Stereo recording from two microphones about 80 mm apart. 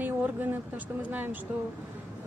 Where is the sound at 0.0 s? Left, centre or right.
Right.